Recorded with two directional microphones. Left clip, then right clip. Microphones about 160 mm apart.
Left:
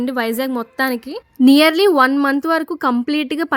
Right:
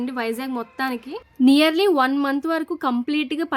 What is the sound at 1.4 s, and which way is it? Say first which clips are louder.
Speech: left 5 dB; 40° left (ahead or behind).